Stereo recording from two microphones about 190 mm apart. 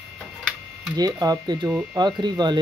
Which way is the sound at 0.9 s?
20° right (ahead or behind).